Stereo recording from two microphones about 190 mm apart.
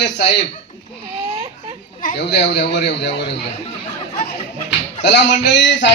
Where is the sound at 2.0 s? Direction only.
60° left (ahead or behind).